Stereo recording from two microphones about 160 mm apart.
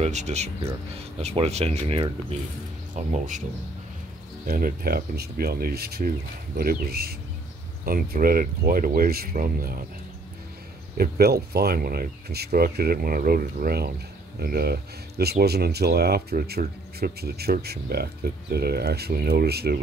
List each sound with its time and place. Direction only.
0.0 s speech: 45° right (ahead or behind)
2.9 s speech: 50° right (ahead or behind)
4.5 s speech: 65° right (ahead or behind)
11.0 s speech: 75° right (ahead or behind)